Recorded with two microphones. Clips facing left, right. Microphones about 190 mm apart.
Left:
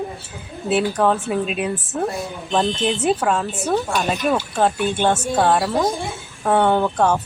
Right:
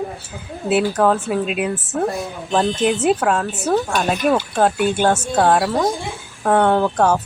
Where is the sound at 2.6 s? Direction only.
15° right (ahead or behind).